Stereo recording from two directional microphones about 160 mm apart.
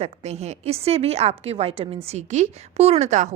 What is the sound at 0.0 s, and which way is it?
A woman's voice, 40° right (ahead or behind).